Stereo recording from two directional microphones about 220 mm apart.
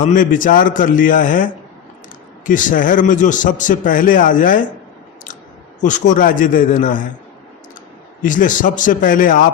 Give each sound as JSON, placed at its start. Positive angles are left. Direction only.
{"t": 0.0, "sound": "a man's voice", "side_deg": 35}
{"t": 2.5, "sound": "a man's voice", "side_deg": 35}
{"t": 5.8, "sound": "a man's voice", "side_deg": 35}
{"t": 8.2, "sound": "a man's voice", "side_deg": 35}